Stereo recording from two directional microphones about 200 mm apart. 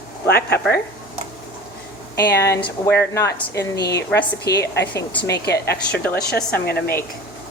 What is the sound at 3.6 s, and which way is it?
Speech, 55° left (ahead or behind).